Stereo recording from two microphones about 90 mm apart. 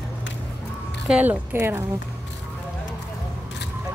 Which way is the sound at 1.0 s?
15° right (ahead or behind).